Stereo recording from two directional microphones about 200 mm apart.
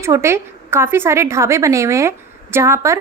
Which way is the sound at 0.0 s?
15° right (ahead or behind).